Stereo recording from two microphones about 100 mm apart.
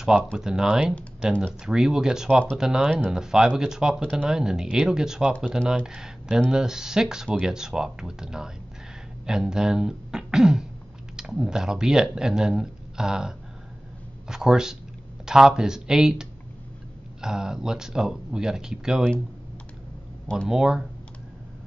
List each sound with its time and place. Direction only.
0.0 s speech: 5° right (ahead or behind)
20.4 s speech: 5° right (ahead or behind)